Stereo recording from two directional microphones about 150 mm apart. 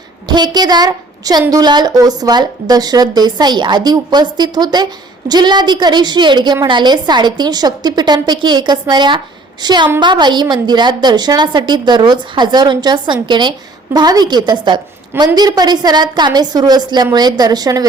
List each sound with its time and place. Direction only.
0.3 s a woman's voice: 30° right (ahead or behind)